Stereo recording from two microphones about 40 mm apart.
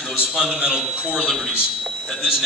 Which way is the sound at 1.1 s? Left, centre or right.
Centre.